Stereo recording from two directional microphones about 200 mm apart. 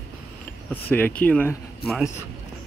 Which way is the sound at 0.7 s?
10° left (ahead or behind).